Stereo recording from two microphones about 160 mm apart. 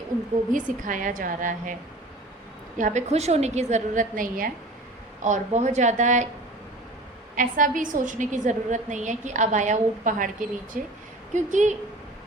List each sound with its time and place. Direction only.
0.5 s a woman's voice: 55° right (ahead or behind)
2.7 s a woman's voice: 50° right (ahead or behind)
5.2 s a woman's voice: 50° right (ahead or behind)
7.3 s a woman's voice: 55° right (ahead or behind)